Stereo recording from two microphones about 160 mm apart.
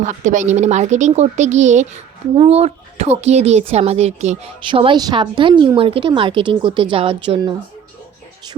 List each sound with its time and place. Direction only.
0.0 s speech: 50° right (ahead or behind)
2.3 s a woman's voice: 40° right (ahead or behind)
4.7 s a woman's voice: 30° right (ahead or behind)